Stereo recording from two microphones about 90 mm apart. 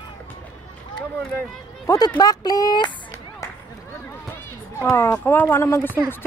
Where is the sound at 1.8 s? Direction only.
40° left (ahead or behind).